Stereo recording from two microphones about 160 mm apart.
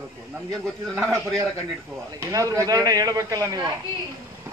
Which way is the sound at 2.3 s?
20° right (ahead or behind).